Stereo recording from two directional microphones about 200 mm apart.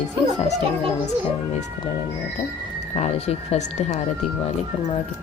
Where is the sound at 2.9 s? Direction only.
35° left (ahead or behind).